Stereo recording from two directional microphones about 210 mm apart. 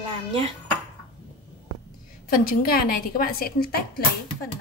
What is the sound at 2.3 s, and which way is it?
A woman's voice, 45° left (ahead or behind).